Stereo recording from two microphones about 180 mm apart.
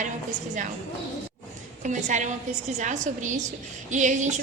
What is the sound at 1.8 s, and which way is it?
A woman's voice, 45° right (ahead or behind).